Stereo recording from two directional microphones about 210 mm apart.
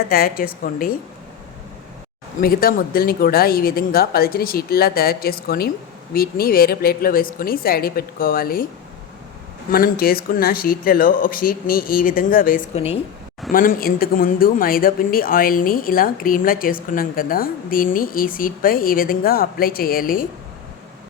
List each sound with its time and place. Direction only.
0.1 s speech: 45° left (ahead or behind)
2.4 s speech: 45° left (ahead or behind)
9.6 s speech: 45° left (ahead or behind)
13.5 s speech: 40° left (ahead or behind)